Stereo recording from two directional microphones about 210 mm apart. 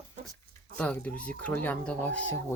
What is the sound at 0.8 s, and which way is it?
Speech, 5° left (ahead or behind).